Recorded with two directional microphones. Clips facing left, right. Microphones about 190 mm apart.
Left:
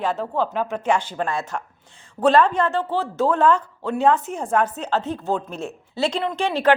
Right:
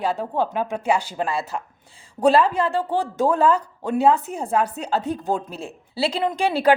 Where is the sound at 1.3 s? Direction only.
30° right (ahead or behind).